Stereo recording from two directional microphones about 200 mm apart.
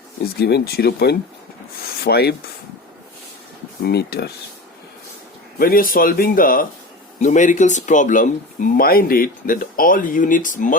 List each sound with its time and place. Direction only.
0.3 s speech: 50° left (ahead or behind)
3.8 s speech: 55° left (ahead or behind)
5.5 s speech: 45° left (ahead or behind)